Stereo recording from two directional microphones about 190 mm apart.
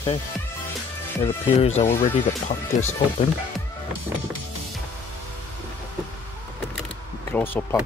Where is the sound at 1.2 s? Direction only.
35° left (ahead or behind).